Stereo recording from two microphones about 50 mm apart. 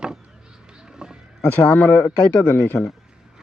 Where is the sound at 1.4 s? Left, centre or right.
Left.